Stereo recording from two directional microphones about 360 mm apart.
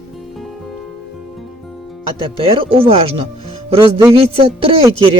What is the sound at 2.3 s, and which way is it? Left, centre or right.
A man's voice, centre.